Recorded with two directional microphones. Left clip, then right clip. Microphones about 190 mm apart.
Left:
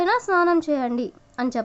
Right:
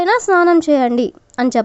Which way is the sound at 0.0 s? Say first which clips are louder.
Right 7 dB; 40° right (ahead or behind).